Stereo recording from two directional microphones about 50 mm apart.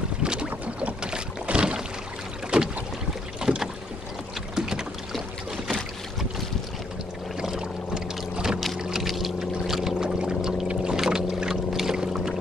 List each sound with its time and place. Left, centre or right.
0.2 s boat: centre
7.3 s boat: centre
10.0 s a sound: centre
10.7 s boat: centre